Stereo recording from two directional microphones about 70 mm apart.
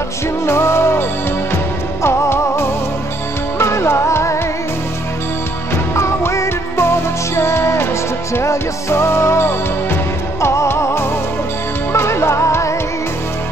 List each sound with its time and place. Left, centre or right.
0.5 s music: left
2.0 s music: left
5.9 s music: left